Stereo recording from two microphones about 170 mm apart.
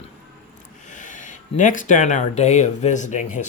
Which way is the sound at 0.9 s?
50° left (ahead or behind).